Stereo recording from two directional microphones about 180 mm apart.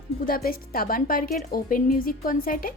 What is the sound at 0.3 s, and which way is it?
A woman's voice, 55° left (ahead or behind).